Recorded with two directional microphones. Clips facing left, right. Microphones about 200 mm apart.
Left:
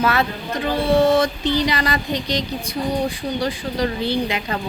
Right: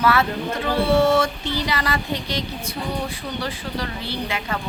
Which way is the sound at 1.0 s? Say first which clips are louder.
Left 2 dB; 15° left (ahead or behind).